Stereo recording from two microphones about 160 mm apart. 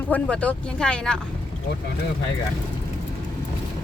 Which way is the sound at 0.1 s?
10° left (ahead or behind).